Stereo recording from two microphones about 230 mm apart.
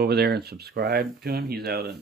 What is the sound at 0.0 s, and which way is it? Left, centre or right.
Speech, right.